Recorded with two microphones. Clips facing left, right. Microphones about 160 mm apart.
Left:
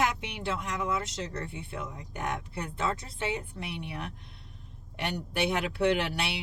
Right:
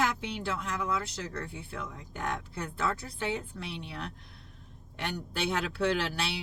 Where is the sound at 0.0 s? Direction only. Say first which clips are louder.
Left 1 dB; 20° left (ahead or behind).